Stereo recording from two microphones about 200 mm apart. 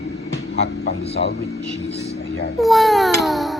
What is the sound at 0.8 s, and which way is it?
Speech, 55° left (ahead or behind).